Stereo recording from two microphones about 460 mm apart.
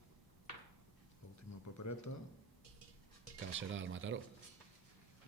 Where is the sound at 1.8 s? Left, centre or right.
Left.